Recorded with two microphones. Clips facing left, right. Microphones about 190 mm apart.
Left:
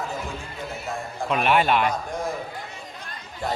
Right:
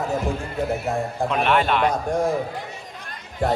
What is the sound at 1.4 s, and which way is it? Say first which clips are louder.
Speech: even; 5° left (ahead or behind).